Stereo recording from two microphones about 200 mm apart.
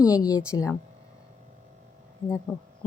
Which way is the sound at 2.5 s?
Centre (ahead or behind).